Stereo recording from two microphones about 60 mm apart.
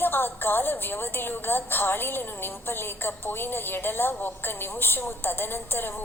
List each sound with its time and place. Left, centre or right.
0.0 s a woman's voice: left